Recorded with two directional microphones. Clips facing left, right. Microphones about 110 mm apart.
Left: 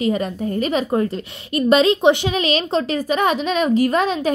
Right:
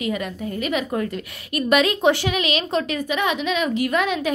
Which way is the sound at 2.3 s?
35° left (ahead or behind).